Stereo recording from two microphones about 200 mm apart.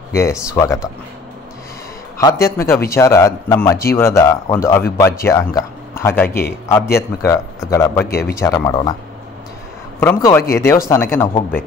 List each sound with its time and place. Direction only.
0.1 s speech: 15° left (ahead or behind)
2.1 s a man's voice: 15° left (ahead or behind)
9.9 s speech: 10° left (ahead or behind)